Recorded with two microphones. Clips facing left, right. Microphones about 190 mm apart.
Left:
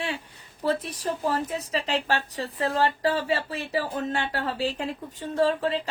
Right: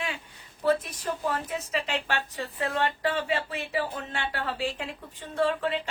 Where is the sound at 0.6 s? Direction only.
35° left (ahead or behind).